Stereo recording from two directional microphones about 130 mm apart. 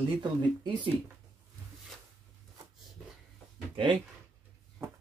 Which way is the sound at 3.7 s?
35° right (ahead or behind).